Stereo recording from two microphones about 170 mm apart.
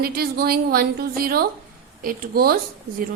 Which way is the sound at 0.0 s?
65° right (ahead or behind).